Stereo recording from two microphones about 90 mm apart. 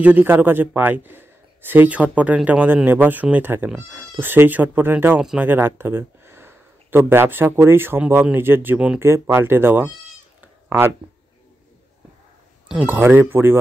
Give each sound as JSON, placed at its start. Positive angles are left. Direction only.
{"t": 0.0, "sound": "a man's voice", "side_deg": -20}
{"t": 9.0, "sound": "a man's voice", "side_deg": -30}
{"t": 10.4, "sound": "a sound", "side_deg": -25}
{"t": 12.8, "sound": "a man's voice", "side_deg": -25}